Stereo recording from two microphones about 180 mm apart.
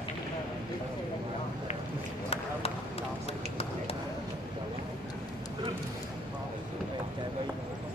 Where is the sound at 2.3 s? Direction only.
35° left (ahead or behind).